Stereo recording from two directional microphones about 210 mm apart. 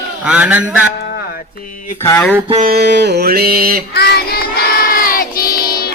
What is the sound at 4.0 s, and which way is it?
Child singing, 50° left (ahead or behind).